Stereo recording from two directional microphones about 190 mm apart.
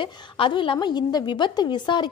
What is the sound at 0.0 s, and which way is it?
A woman's voice, 25° left (ahead or behind).